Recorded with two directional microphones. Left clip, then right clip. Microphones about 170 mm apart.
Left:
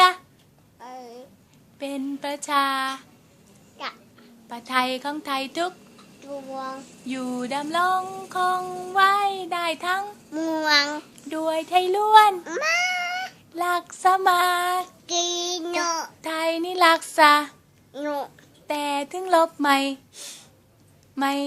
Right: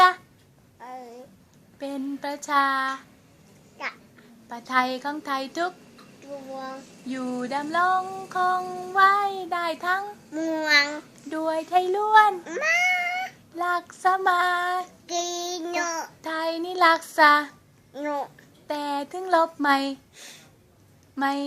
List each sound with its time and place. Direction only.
1.8 s speech: 15° left (ahead or behind)
4.4 s speech: 15° left (ahead or behind); by 11.0 s 35° left (ahead or behind)
11.3 s speech: 10° left (ahead or behind)
13.6 s child singing: 20° left (ahead or behind)
17.9 s speech: 15° left (ahead or behind)
18.7 s child singing: 15° left (ahead or behind)
21.2 s child singing: 20° left (ahead or behind)